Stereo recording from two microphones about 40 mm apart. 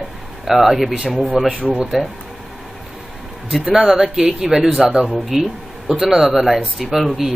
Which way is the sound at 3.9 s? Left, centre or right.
Centre.